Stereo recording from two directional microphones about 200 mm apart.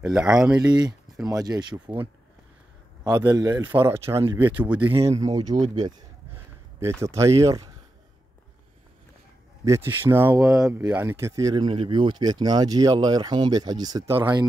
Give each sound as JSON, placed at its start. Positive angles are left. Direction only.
{"t": 0.0, "sound": "speech", "side_deg": -5}
{"t": 0.6, "sound": "speech", "side_deg": -20}
{"t": 3.0, "sound": "a man's voice", "side_deg": -20}
{"t": 9.7, "sound": "a man's voice", "side_deg": -15}